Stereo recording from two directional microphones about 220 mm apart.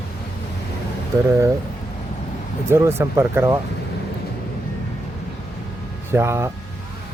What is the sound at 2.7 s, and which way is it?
Speech, 10° right (ahead or behind).